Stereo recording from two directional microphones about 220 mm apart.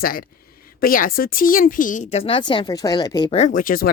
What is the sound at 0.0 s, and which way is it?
A woman's voice, 40° left (ahead or behind).